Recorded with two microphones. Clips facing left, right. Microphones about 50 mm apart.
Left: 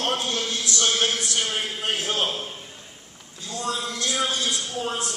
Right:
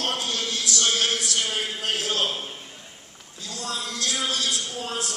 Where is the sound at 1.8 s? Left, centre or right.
Left.